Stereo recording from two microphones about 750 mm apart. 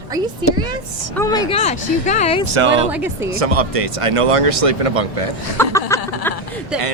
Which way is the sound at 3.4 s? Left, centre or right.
Right.